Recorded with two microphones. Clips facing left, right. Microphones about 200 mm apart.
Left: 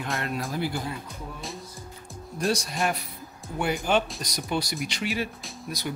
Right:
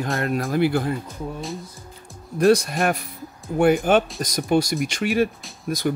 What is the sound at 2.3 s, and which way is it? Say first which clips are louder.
Speech: right 10 dB; 60° right (ahead or behind).